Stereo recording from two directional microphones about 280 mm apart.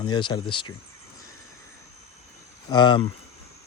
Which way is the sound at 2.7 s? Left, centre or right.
Centre.